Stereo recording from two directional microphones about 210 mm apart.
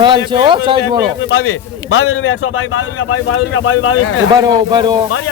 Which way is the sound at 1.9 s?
80° left.